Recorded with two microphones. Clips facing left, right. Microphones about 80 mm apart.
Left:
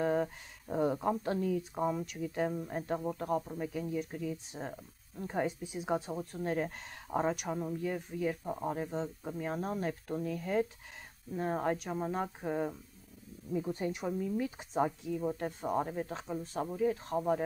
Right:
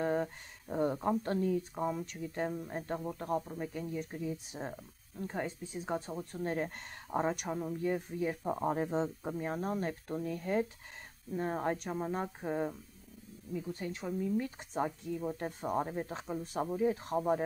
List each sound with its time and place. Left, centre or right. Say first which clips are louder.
0.0 s a sound: left 2 dB; centre
1.6 s speech: left 2 dB; centre
5.2 s speech: left 3 dB; centre
8.5 s speech: right 3 dB; right
9.6 s speech: even; centre
13.5 s speech: left 4 dB; left
14.2 s speech: even; centre